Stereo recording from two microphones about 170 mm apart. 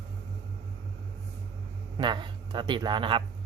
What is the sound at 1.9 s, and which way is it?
Speech, 25° right (ahead or behind).